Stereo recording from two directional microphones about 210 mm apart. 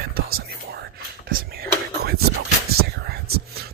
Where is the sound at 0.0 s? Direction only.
45° right (ahead or behind).